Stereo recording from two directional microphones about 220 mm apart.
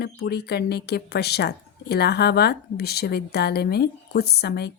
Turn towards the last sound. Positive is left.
turn(degrees=45)  # may be behind; listen again after turning